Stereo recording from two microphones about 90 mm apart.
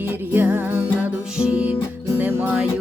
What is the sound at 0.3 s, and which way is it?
Music, 20° right (ahead or behind).